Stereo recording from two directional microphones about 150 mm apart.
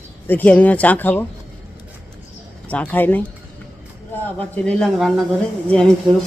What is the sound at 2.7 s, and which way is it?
Speech, 10° left (ahead or behind).